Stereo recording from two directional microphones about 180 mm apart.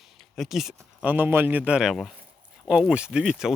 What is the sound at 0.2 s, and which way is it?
Speech, centre (ahead or behind).